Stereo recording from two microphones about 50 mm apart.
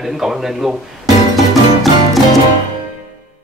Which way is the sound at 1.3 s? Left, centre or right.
Centre.